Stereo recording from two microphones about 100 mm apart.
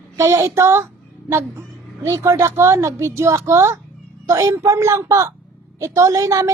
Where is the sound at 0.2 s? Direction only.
30° right (ahead or behind).